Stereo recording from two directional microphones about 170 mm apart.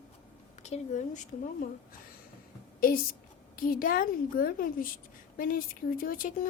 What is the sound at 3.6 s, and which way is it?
A woman's voice, 55° left (ahead or behind).